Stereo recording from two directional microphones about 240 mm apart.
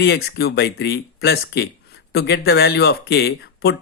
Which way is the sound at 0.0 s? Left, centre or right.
Left.